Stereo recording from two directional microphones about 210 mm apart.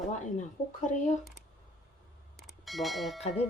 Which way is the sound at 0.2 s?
35° left (ahead or behind).